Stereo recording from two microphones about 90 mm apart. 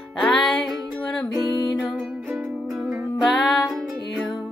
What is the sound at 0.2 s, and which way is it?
Music, 5° left (ahead or behind).